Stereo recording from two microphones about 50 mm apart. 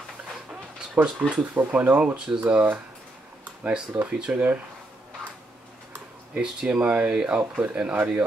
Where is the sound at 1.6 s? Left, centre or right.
Right.